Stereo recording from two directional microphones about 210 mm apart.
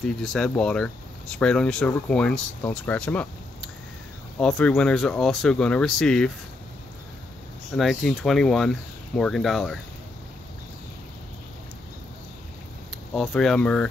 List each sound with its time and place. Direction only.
0.0 s speech: centre (ahead or behind)
7.7 s speech: centre (ahead or behind)
13.1 s speech: centre (ahead or behind)